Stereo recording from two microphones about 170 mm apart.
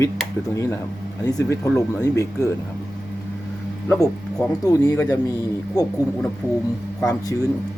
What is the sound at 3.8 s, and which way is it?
Speech, 15° left (ahead or behind).